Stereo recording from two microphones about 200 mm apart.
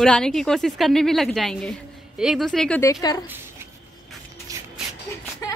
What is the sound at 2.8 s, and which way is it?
Speech, 15° left (ahead or behind).